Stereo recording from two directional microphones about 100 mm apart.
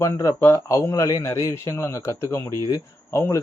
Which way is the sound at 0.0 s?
30° left (ahead or behind).